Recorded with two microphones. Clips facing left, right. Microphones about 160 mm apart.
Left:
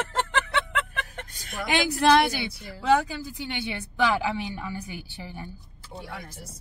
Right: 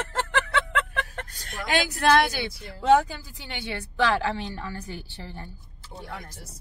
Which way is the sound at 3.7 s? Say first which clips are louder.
Right 1 dB; 15° left (ahead or behind).